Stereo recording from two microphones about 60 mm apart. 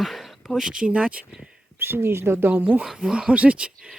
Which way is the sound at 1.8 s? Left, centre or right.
Right.